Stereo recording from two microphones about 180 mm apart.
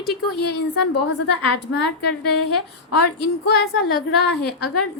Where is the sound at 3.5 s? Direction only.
65° left (ahead or behind).